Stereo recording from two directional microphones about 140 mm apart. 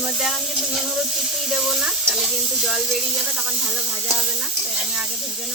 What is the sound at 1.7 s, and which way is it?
Stir, 5° right (ahead or behind).